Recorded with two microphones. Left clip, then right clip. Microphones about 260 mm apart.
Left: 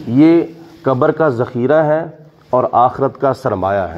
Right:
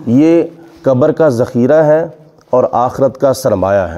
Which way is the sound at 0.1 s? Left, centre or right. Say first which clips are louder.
Right 1 dB; right.